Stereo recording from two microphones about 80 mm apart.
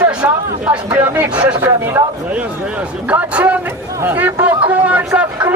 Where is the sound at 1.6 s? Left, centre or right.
Right.